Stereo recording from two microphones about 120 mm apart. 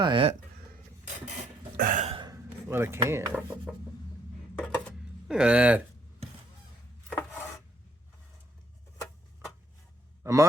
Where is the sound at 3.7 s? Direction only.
Centre (ahead or behind).